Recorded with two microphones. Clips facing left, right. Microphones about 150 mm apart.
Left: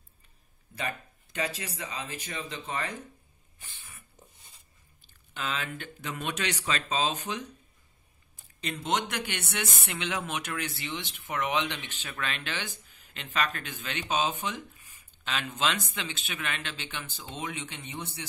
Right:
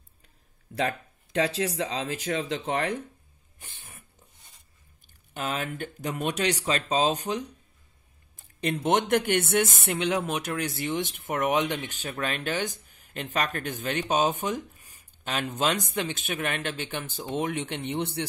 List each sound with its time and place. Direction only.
0.7 s speech: 80° right
5.3 s speech: 45° right (ahead or behind)
8.8 s speech: 50° right (ahead or behind)